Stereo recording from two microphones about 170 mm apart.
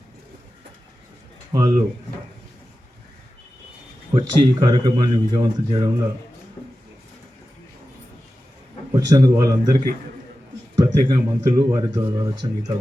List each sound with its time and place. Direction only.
1.5 s speech: 20° right (ahead or behind)
4.1 s speech: 25° right (ahead or behind)
8.9 s speech: 20° right (ahead or behind)